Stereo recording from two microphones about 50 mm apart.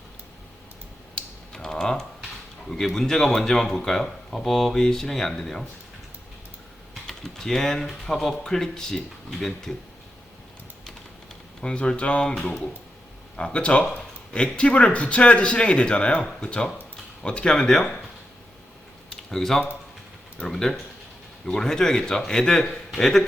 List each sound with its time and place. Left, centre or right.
1.1 s typing: centre
2.6 s speech: centre
7.1 s speech: centre
11.6 s speech: centre
19.1 s speech: centre